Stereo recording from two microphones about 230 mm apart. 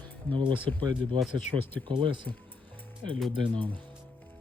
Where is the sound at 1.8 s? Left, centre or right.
Right.